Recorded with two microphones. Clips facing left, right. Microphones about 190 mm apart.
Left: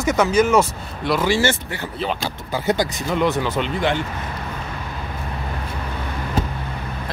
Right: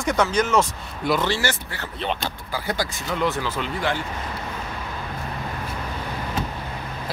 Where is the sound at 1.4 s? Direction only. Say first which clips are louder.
Left 6 dB; 20° left (ahead or behind).